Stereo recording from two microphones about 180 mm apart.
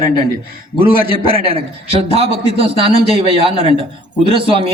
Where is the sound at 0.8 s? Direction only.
30° right (ahead or behind).